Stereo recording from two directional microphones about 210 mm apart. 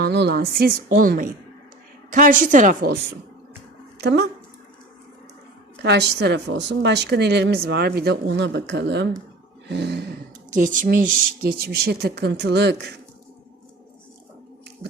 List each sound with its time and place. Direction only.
0.0 s a woman's voice: 55° right (ahead or behind)
5.8 s a woman's voice: 55° right (ahead or behind)
10.5 s speech: 40° right (ahead or behind); by 12.9 s 55° right (ahead or behind)